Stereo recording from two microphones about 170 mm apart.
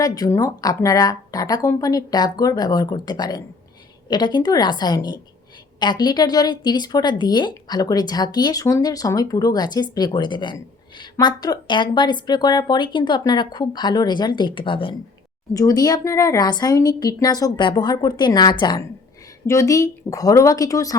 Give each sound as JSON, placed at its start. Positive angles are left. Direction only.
{"t": 0.0, "sound": "a woman's voice", "side_deg": 20}